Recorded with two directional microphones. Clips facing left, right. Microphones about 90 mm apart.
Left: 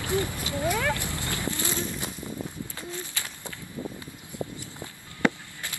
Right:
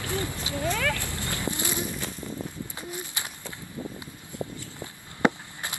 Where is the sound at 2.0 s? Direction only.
15° left (ahead or behind).